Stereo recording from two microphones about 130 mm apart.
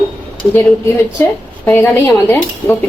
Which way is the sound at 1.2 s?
20° left (ahead or behind).